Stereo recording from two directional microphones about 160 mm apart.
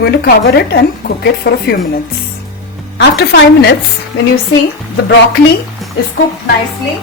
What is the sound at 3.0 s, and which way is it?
Speech, 90° left.